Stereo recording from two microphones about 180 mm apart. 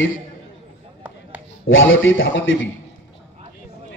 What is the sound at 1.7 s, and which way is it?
A man's voice, 90° left.